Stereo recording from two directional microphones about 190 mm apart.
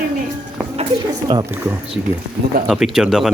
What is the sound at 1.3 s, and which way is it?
A man's voice, 15° right (ahead or behind).